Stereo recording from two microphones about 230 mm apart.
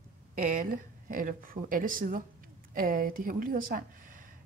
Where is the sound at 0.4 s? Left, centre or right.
Right.